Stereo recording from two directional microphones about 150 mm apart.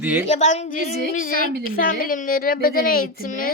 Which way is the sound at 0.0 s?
10° right (ahead or behind).